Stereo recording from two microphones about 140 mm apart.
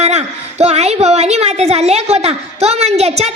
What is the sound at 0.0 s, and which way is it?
A woman's voice, 50° right (ahead or behind).